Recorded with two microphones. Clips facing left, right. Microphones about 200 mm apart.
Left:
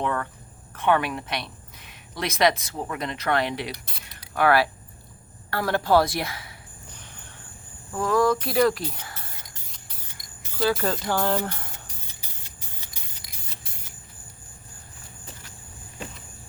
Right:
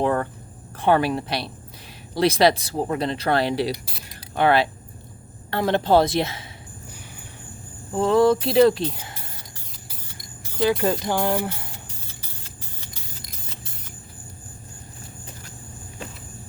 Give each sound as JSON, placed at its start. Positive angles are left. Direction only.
{"t": 0.0, "sound": "speech", "side_deg": -35}
{"t": 7.9, "sound": "speech", "side_deg": -25}
{"t": 10.6, "sound": "speech", "side_deg": -15}
{"t": 12.0, "sound": "a sound", "side_deg": 15}